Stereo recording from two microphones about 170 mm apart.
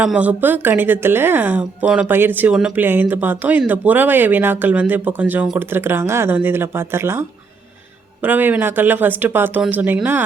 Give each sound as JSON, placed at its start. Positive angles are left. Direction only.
{"t": 0.0, "sound": "a woman's voice", "side_deg": -5}